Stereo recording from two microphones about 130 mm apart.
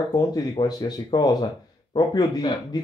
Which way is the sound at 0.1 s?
30° left (ahead or behind).